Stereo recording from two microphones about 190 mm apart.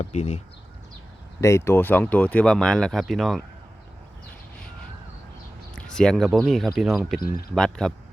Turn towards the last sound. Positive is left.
turn(degrees=5)  # may be behind; listen again after turning